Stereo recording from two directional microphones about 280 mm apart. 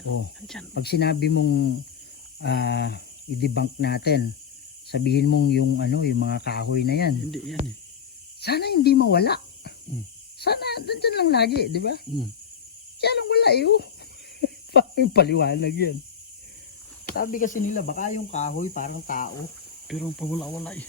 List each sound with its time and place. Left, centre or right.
0.7 s speech: left
7.3 s cricket: centre
8.4 s speech: left
17.2 s speech: left
19.9 s cricket: centre